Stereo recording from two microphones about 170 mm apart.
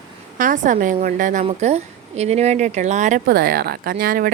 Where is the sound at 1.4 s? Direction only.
40° right (ahead or behind).